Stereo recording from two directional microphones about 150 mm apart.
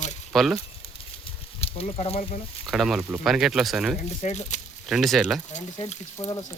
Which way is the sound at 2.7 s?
Centre (ahead or behind).